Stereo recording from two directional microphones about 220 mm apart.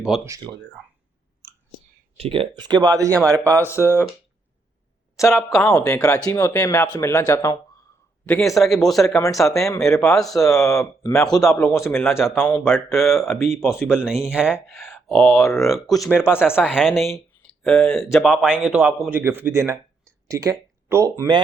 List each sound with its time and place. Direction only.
0.3 s speech: 15° right (ahead or behind)
2.1 s speech: 25° right (ahead or behind)
3.7 s speech: 10° left (ahead or behind)
5.2 s speech: 15° left (ahead or behind)
8.5 s speech: centre (ahead or behind)
9.7 s speech: 15° left (ahead or behind)
11.8 s speech: centre (ahead or behind)
13.3 s speech: 10° left (ahead or behind)
13.6 s speech: centre (ahead or behind)
16.6 s speech: centre (ahead or behind)